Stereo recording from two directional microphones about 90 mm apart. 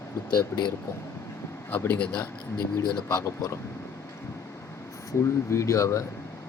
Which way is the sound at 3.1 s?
40° left (ahead or behind).